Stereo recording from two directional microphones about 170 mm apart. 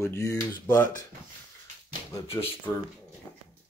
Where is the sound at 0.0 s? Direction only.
20° left (ahead or behind).